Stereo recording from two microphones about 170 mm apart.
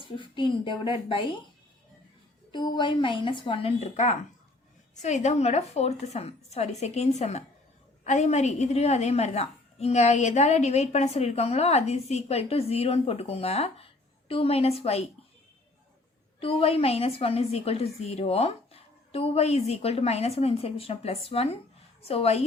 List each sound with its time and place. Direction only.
0.0 s a woman's voice: 30° left (ahead or behind)
2.5 s a woman's voice: 25° left (ahead or behind)
16.4 s a woman's voice: 30° left (ahead or behind)